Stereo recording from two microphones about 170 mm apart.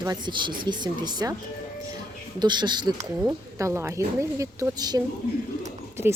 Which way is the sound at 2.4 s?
25° right (ahead or behind).